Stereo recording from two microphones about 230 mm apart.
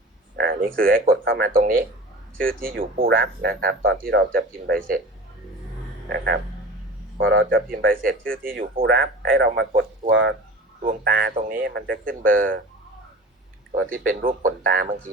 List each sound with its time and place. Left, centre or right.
0.3 s a sound: right
0.8 s speech: right
6.1 s speech: right
7.7 s speech: right
10.8 s speech: right
13.9 s speech: right